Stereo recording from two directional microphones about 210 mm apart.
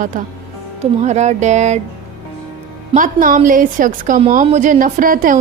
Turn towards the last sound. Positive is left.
turn(degrees=-40)  # may be behind; listen again after turning